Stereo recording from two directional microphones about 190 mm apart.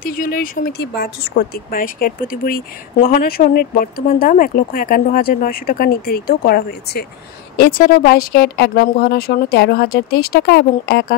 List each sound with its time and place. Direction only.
0.0 s speech: 50° left (ahead or behind)